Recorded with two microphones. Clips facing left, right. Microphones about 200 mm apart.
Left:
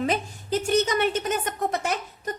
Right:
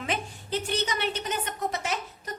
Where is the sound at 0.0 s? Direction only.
40° left (ahead or behind).